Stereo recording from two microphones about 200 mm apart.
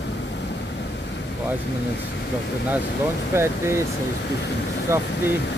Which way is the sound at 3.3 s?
10° right (ahead or behind).